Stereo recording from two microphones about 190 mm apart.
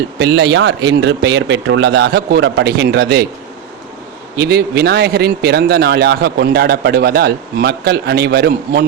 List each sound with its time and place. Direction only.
0.2 s speech: 65° right (ahead or behind)
4.4 s speech: 60° right (ahead or behind)